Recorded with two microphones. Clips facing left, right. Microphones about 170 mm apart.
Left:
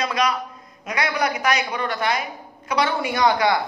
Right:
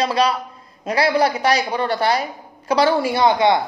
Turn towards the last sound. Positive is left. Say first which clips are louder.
# right 3 dB
turn(degrees=-25)  # may be behind; listen again after turning